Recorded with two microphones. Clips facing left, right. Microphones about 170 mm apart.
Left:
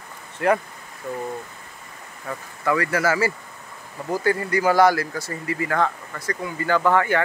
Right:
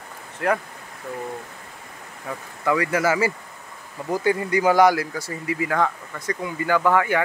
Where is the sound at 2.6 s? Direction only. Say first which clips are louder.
Right 1 dB; 15° right (ahead or behind).